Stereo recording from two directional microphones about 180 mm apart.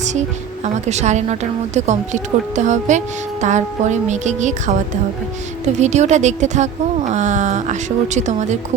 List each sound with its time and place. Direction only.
0.0 s speech: 40° right (ahead or behind)
5.7 s speech: 40° right (ahead or behind)